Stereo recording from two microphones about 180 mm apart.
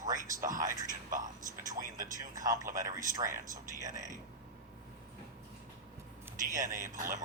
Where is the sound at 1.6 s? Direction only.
50° right (ahead or behind).